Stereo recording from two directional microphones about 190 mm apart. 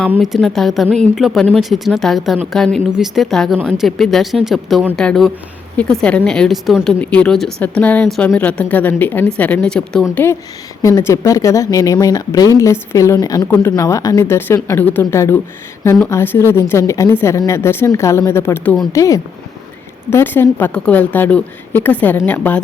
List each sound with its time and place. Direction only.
0.1 s speech: centre (ahead or behind)